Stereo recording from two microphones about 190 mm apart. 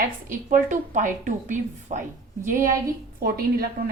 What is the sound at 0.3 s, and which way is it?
A woman's voice, 45° right (ahead or behind).